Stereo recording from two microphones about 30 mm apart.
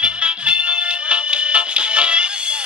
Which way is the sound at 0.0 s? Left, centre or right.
Right.